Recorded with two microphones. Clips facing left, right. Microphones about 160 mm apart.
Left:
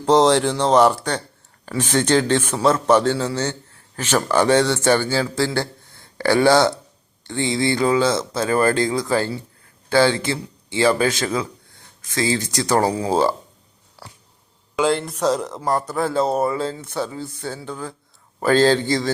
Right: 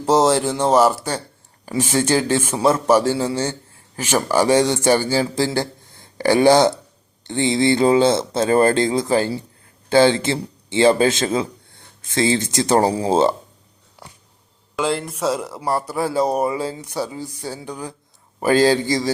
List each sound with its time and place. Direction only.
0.0 s a man's voice: 5° right (ahead or behind); by 13.3 s 25° right (ahead or behind)
14.8 s a man's voice: centre (ahead or behind)